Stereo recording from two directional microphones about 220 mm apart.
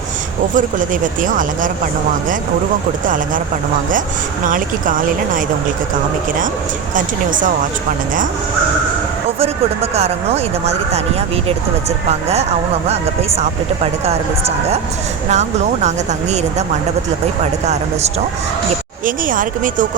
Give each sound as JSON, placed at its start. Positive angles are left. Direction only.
{"t": 0.5, "sound": "speech", "side_deg": -35}
{"t": 4.4, "sound": "speech", "side_deg": -35}
{"t": 6.9, "sound": "speech", "side_deg": -35}
{"t": 9.4, "sound": "speech", "side_deg": -30}
{"t": 19.0, "sound": "speech", "side_deg": -35}